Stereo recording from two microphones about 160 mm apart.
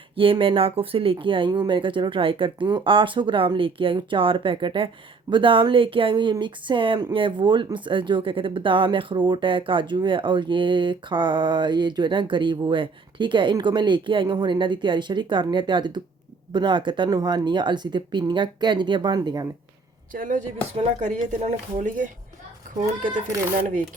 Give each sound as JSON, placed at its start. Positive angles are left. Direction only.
{"t": 0.2, "sound": "speech", "side_deg": -35}
{"t": 20.1, "sound": "speech", "side_deg": -55}